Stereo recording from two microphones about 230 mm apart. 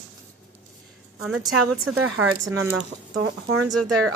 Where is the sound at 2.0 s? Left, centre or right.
Right.